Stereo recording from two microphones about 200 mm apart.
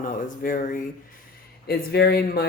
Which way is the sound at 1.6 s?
55° left (ahead or behind).